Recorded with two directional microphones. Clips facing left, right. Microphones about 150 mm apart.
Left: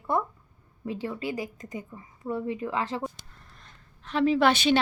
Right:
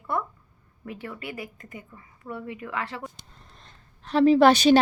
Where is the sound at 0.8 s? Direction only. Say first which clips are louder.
Left 5 dB; 20° left (ahead or behind).